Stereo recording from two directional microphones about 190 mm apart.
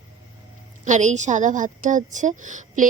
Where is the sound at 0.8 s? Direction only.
40° right (ahead or behind).